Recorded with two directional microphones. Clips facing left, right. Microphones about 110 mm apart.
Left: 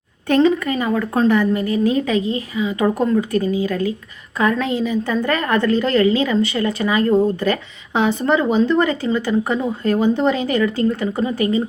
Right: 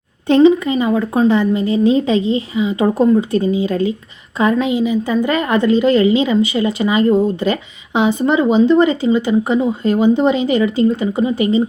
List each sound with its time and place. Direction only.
0.3 s a woman's voice: 20° right (ahead or behind)